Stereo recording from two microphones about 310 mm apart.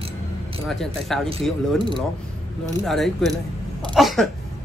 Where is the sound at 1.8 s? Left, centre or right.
Centre.